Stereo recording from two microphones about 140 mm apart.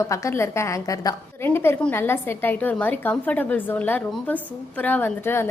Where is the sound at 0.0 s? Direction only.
20° left (ahead or behind).